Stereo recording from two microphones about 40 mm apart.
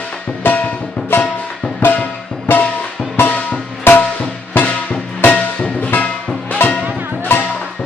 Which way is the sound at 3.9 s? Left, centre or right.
Left.